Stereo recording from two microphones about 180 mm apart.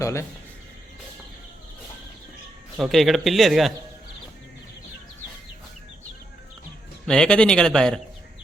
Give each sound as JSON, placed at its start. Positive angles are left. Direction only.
{"t": 0.0, "sound": "speech", "side_deg": 15}
{"t": 2.7, "sound": "a man's voice", "side_deg": 0}
{"t": 7.1, "sound": "a man's voice", "side_deg": 5}